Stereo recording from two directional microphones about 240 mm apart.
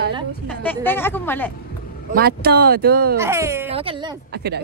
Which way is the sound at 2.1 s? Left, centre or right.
Right.